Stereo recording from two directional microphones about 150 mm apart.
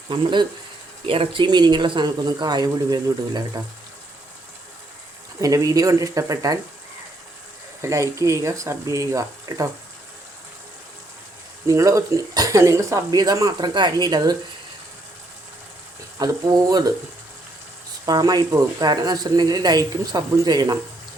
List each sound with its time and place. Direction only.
0.1 s speech: 35° right (ahead or behind)
5.4 s speech: 20° right (ahead or behind)
7.8 s speech: 20° right (ahead or behind)
11.7 s speech: 20° right (ahead or behind)
16.1 s speech: 25° right (ahead or behind)
18.0 s speech: 25° right (ahead or behind)